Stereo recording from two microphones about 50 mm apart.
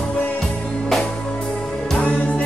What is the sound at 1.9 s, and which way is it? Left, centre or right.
Music, left.